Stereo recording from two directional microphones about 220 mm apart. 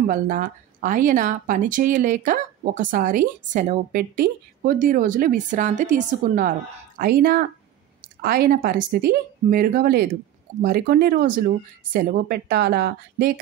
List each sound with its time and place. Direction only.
0.0 s speech: 40° right (ahead or behind)